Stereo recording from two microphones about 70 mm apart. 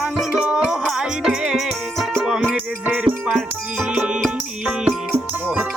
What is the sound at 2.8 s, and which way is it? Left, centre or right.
Music, right.